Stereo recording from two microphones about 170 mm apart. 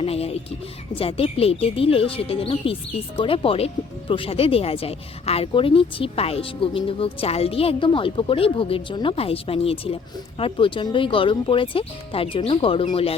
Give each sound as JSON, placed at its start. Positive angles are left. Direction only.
{"t": 0.0, "sound": "music", "side_deg": 35}
{"t": 0.9, "sound": "speech", "side_deg": 35}